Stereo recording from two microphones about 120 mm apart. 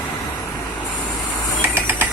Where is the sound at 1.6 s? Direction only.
15° right (ahead or behind).